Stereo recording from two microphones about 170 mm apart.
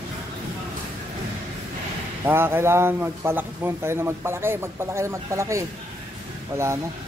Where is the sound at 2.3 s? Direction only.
15° right (ahead or behind).